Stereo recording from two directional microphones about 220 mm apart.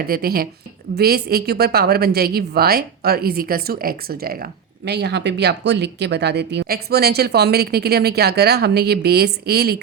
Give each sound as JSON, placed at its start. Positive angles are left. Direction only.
{"t": 0.0, "sound": "speech", "side_deg": -45}